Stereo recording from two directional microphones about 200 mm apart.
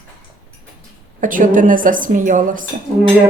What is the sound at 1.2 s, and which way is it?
Speech, 40° right (ahead or behind).